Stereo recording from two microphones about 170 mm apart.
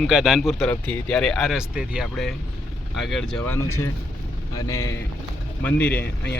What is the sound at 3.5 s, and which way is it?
Speech, 15° left (ahead or behind).